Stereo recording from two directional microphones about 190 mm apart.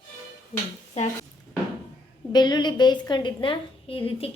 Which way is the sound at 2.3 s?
20° left (ahead or behind).